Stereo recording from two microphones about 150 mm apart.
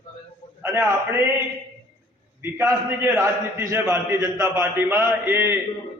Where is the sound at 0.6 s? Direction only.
15° right (ahead or behind).